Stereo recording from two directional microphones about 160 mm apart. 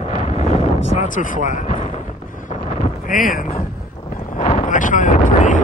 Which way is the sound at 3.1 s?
60° left (ahead or behind).